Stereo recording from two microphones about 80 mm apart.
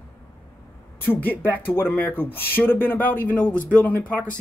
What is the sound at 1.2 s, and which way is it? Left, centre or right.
A man's voice, left.